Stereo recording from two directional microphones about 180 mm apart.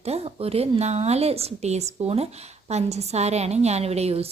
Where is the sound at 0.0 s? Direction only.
35° right (ahead or behind).